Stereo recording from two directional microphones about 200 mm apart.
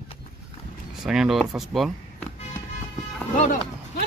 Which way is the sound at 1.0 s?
5° right (ahead or behind).